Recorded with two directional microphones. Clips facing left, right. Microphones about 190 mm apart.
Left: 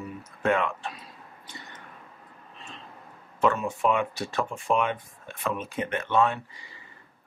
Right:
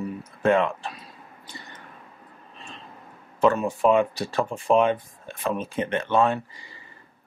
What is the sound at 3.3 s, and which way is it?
Speech, 35° right (ahead or behind).